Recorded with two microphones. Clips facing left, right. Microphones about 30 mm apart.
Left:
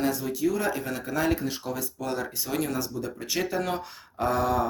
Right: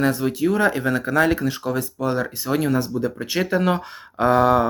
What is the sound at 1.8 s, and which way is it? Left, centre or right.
Speech, right.